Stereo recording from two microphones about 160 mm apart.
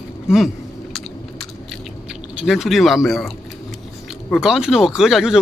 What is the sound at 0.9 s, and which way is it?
Biting, centre (ahead or behind).